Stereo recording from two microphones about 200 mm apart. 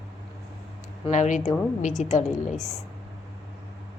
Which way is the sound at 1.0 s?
35° left (ahead or behind).